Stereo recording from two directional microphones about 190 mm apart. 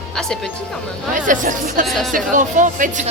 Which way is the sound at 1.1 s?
45° right (ahead or behind).